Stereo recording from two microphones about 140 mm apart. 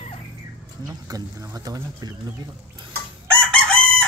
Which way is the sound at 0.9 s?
25° right (ahead or behind).